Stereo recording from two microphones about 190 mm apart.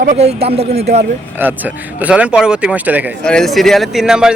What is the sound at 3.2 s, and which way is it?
Speech, 5° left (ahead or behind).